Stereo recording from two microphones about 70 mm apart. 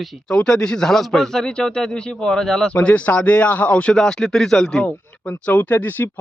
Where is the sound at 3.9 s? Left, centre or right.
Centre.